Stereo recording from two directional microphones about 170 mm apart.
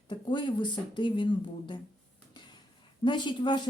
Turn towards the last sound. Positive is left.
turn(degrees=25)  # may be behind; listen again after turning